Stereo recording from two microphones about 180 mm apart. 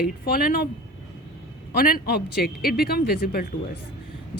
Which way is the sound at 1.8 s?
55° left (ahead or behind).